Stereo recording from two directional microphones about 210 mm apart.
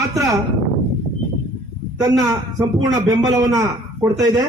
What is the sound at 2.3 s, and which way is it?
Speech, 15° right (ahead or behind).